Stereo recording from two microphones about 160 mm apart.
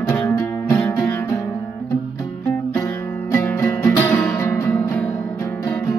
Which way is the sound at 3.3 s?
15° left (ahead or behind).